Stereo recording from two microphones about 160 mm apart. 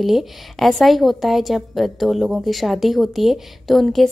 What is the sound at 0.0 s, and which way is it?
A woman's voice, centre (ahead or behind).